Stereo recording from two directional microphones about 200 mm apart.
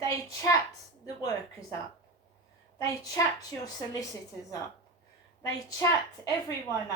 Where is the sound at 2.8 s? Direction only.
15° left (ahead or behind).